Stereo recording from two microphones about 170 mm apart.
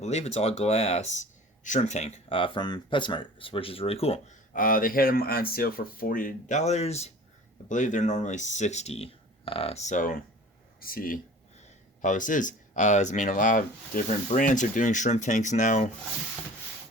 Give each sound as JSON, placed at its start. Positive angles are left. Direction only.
{"t": 0.0, "sound": "speech", "side_deg": 40}
{"t": 4.5, "sound": "speech", "side_deg": 55}